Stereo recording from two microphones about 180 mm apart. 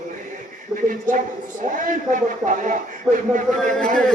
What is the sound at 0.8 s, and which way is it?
Speech, 45° right (ahead or behind).